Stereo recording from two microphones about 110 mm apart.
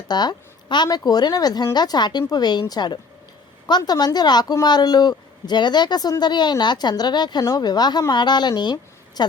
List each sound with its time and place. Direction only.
0.1 s a woman's voice: 40° left (ahead or behind)